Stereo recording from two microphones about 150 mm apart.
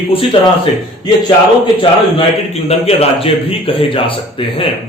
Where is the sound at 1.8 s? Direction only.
40° left (ahead or behind).